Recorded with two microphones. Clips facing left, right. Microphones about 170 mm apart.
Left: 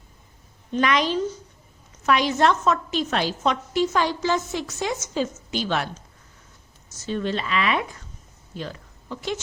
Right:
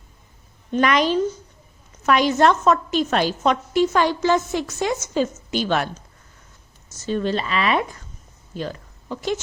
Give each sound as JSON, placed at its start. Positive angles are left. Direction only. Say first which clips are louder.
{"t": 0.7, "sound": "a woman's voice", "louder": "right 3 dB", "side_deg": -50}
{"t": 7.0, "sound": "speech", "louder": "right 3 dB", "side_deg": -40}
{"t": 8.5, "sound": "a sound", "louder": "right 5 dB", "side_deg": -45}